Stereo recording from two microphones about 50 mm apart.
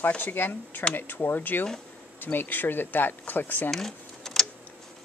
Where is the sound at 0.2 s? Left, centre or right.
Left.